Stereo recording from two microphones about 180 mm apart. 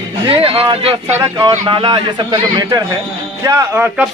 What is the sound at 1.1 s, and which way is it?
Speech, 15° right (ahead or behind).